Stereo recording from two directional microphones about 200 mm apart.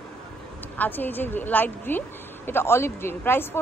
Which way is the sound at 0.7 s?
10° left (ahead or behind).